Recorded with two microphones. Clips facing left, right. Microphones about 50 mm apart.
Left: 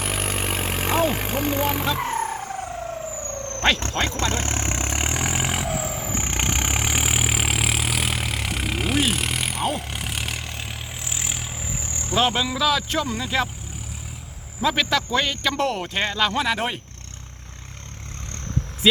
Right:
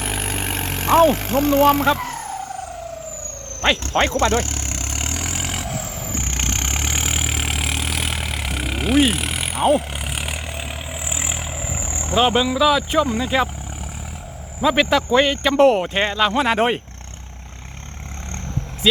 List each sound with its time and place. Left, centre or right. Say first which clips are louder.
0.0 s vehicle: right 1 dB; centre
1.0 s speech: right 7 dB; centre
2.0 s vehicle: left 2 dB; left
4.2 s speech: right 7 dB; right
4.4 s vehicle: left 3 dB; left; by 13.5 s centre
14.6 s speech: right 5 dB; centre
16.4 s speech: right 6 dB; right